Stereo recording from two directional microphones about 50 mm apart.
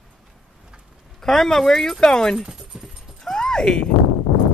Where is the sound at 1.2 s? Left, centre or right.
Centre.